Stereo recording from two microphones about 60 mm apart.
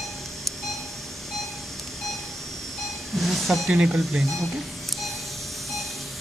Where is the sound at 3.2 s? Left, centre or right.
Centre.